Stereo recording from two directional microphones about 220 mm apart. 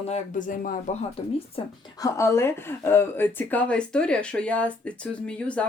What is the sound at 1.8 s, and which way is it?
Speech, 15° left (ahead or behind).